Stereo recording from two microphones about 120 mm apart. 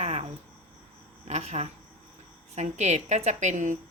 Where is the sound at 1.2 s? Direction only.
65° right (ahead or behind).